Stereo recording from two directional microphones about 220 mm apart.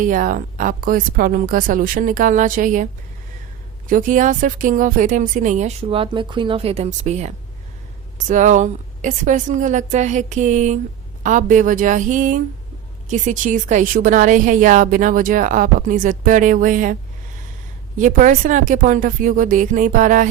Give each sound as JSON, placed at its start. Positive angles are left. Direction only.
{"t": 0.0, "sound": "a woman's voice", "side_deg": -35}
{"t": 3.8, "sound": "a woman's voice", "side_deg": -40}
{"t": 8.3, "sound": "a woman's voice", "side_deg": -35}